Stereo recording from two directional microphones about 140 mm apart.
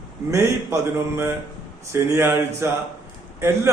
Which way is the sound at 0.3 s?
20° right (ahead or behind).